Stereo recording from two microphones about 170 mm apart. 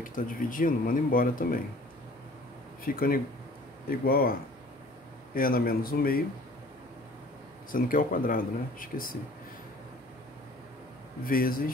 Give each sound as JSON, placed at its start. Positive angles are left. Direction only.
{"t": 0.0, "sound": "speech", "side_deg": 55}
{"t": 2.8, "sound": "speech", "side_deg": 60}
{"t": 7.7, "sound": "speech", "side_deg": 55}
{"t": 11.2, "sound": "speech", "side_deg": 55}